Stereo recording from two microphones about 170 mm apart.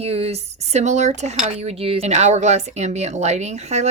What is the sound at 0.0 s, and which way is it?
Speech, 35° right (ahead or behind).